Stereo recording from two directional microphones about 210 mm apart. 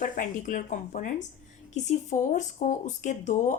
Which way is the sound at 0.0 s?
35° left (ahead or behind).